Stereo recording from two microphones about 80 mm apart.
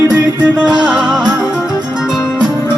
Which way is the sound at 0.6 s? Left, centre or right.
Right.